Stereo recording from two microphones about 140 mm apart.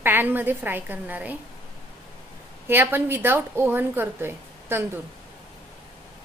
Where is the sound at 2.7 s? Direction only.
15° right (ahead or behind).